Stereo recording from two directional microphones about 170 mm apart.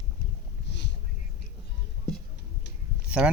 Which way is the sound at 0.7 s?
90° left.